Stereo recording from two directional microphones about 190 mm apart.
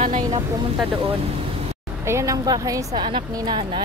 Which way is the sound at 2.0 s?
15° right (ahead or behind).